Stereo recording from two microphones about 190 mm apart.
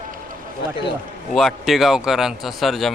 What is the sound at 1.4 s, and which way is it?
A man's voice, centre (ahead or behind).